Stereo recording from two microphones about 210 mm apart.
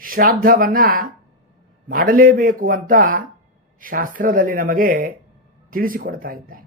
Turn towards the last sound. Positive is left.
turn(degrees=-45)  # may be behind; listen again after turning